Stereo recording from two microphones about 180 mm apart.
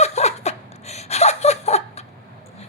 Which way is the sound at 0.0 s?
35° left (ahead or behind).